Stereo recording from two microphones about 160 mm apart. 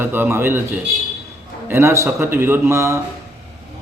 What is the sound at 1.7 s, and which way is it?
A man's voice, 15° right (ahead or behind).